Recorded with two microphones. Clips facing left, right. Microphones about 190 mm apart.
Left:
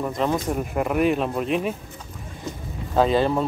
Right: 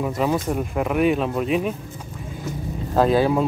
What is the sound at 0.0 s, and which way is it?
Speech, 5° right (ahead or behind).